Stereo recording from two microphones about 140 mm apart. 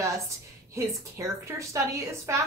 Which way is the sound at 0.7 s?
20° right (ahead or behind).